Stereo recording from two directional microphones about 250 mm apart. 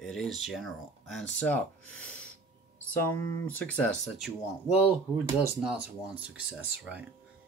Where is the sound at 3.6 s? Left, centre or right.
Centre.